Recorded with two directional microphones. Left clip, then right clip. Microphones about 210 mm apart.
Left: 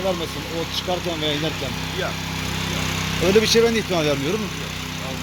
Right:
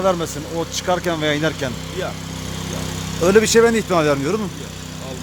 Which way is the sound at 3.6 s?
15° right (ahead or behind).